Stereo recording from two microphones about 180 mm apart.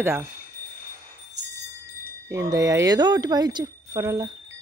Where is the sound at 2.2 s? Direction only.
15° right (ahead or behind).